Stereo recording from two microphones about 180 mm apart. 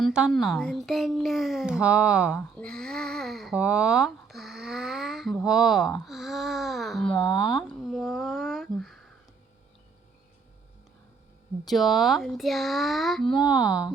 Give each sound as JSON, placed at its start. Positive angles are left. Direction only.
{"t": 0.0, "sound": "speech", "side_deg": -5}
{"t": 7.3, "sound": "speech", "side_deg": 25}
{"t": 7.5, "sound": "speech", "side_deg": 0}
{"t": 11.6, "sound": "speech", "side_deg": 0}